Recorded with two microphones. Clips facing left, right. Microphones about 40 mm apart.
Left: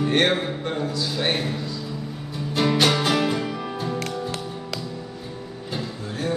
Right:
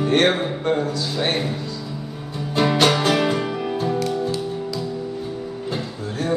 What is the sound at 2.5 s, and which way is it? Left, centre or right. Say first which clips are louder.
Music: right 3 dB; centre.